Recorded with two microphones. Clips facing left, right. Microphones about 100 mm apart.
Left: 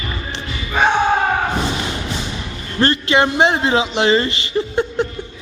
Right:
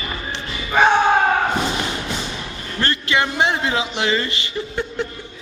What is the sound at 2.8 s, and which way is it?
A man's voice, 25° left (ahead or behind).